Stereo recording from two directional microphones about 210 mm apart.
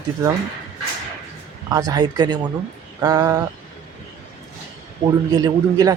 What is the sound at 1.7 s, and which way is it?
Speech, 15° right (ahead or behind).